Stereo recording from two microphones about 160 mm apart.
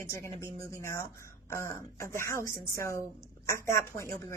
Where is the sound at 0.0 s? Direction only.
20° left (ahead or behind).